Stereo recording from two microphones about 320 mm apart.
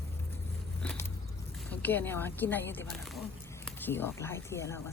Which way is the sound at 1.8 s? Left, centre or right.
Centre.